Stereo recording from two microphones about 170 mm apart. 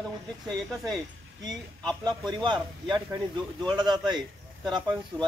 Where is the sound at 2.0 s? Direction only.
25° right (ahead or behind).